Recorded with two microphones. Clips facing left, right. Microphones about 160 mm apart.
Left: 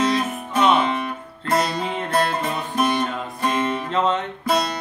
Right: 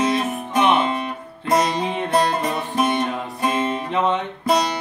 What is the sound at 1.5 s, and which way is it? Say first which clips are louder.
Music: right 2 dB; centre (ahead or behind).